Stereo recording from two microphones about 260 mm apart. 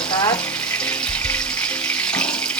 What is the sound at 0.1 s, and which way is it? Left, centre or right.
Frying, centre.